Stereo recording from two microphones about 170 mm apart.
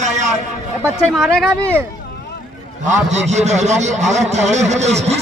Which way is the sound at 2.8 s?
45° right (ahead or behind).